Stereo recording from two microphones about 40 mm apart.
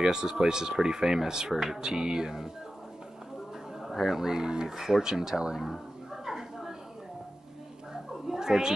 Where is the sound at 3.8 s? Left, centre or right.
Centre.